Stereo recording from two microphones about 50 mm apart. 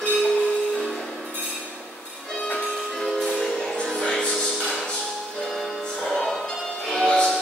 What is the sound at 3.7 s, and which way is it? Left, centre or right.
Music, centre.